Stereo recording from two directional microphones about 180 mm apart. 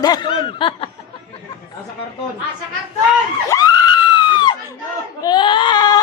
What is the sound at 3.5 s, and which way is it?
Screaming, 20° left (ahead or behind).